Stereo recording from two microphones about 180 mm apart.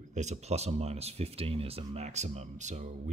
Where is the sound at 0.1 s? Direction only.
40° right (ahead or behind).